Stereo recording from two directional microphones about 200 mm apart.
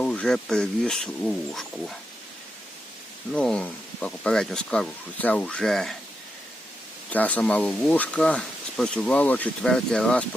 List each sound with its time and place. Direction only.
0.0 s speech: 5° left (ahead or behind)
3.3 s speech: 5° left (ahead or behind)
7.1 s speech: 5° left (ahead or behind)